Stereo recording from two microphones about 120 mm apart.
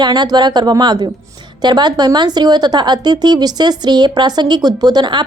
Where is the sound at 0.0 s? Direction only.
35° right (ahead or behind).